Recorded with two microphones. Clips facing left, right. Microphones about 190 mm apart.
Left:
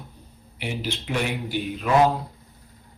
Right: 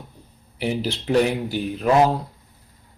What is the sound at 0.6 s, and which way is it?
A man's voice, 35° right (ahead or behind).